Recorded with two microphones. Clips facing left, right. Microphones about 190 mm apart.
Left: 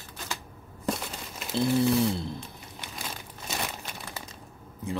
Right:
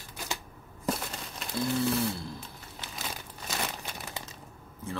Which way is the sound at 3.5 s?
20° left (ahead or behind).